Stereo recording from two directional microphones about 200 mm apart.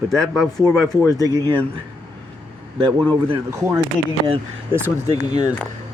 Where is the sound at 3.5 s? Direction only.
15° right (ahead or behind).